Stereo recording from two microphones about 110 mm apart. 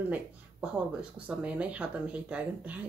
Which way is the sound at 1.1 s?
10° right (ahead or behind).